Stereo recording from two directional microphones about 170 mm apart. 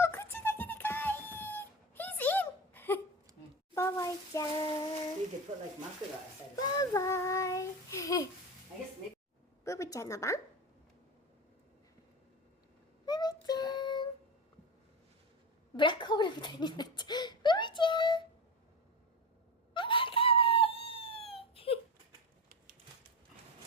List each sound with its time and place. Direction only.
0.0 s wail: 15° left (ahead or behind)
3.8 s child singing: 20° left (ahead or behind)
6.6 s child singing: 20° left (ahead or behind)
9.6 s a woman's voice: 20° left (ahead or behind)
13.1 s child singing: 25° left (ahead or behind)
15.7 s a sound: 30° left (ahead or behind)
19.7 s a sound: 30° left (ahead or behind)